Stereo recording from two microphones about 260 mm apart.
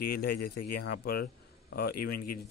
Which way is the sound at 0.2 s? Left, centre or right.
Left.